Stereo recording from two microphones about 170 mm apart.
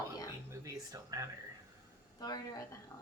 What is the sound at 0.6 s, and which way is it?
Speech, 20° right (ahead or behind).